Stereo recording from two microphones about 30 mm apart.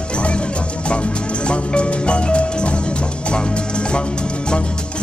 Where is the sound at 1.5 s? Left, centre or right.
Left.